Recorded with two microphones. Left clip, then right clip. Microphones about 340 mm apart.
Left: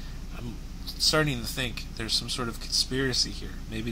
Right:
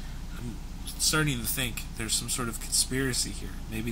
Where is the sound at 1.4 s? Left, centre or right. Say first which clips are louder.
Left 1 dB; centre.